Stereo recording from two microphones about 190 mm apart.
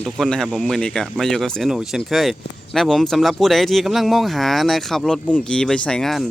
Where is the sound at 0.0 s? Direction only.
Centre (ahead or behind).